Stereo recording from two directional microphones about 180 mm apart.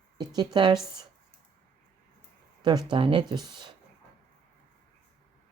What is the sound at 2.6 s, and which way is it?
Speech, 25° right (ahead or behind).